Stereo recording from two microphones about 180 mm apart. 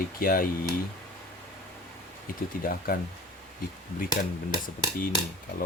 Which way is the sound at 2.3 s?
50° left (ahead or behind).